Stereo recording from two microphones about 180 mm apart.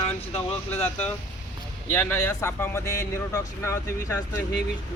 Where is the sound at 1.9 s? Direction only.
10° left (ahead or behind).